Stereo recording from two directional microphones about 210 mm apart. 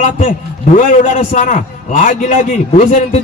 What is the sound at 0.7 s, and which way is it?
A man's voice, 35° left (ahead or behind).